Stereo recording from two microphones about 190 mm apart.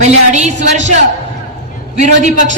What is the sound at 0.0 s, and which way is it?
Speech, 35° right (ahead or behind).